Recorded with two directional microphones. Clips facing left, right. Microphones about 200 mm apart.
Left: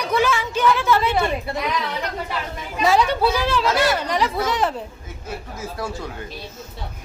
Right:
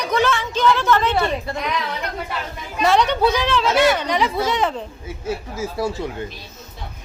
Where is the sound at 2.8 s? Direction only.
5° left (ahead or behind).